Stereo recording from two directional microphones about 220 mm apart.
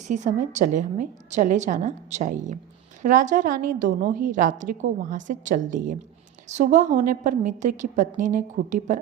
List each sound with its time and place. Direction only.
0.1 s a woman's voice: 35° right (ahead or behind)